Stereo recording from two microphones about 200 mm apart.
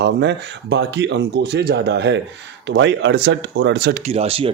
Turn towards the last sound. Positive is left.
turn(degrees=-30)  # may be behind; listen again after turning